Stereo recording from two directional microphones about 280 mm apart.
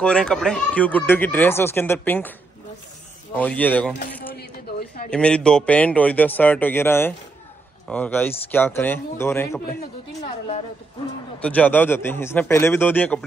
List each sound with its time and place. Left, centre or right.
0.0 s speech: centre
3.3 s speech: centre
4.3 s a sound: left
5.1 s speech: centre
11.3 s speech: centre